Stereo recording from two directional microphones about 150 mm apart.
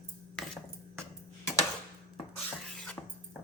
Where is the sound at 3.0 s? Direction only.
15° left (ahead or behind).